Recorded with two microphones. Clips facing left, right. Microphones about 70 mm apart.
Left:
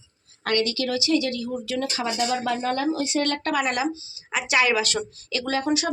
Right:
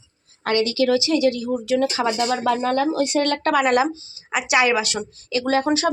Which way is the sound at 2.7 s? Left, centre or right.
Right.